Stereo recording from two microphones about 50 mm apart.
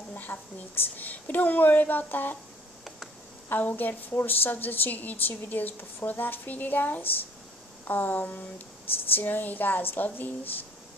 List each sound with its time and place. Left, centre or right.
0.1 s a woman's voice: left
3.4 s a woman's voice: left